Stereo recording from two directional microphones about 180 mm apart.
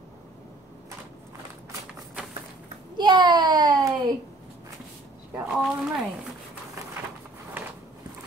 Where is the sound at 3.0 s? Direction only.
25° right (ahead or behind).